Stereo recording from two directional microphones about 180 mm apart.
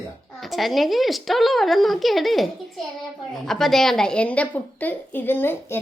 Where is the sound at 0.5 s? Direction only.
Centre (ahead or behind).